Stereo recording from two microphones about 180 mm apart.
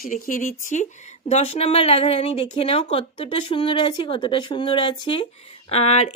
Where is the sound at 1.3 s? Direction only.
35° left (ahead or behind).